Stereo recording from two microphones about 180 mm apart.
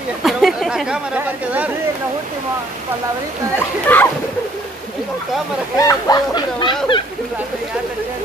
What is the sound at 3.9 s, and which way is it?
Speech, 10° left (ahead or behind).